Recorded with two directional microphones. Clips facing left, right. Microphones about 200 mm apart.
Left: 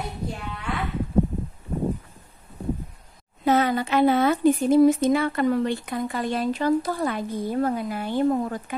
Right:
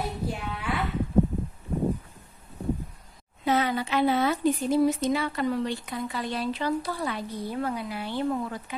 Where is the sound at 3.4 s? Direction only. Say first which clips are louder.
Left 4 dB; 45° left (ahead or behind).